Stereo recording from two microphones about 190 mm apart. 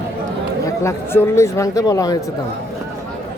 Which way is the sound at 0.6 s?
15° left (ahead or behind).